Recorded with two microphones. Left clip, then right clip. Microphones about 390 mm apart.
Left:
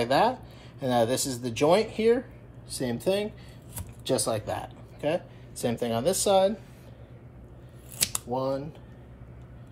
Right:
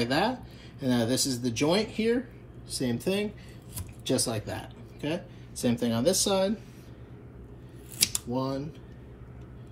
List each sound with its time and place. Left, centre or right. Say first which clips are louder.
0.8 s speech: left 3 dB; left
8.0 s scissors: even; centre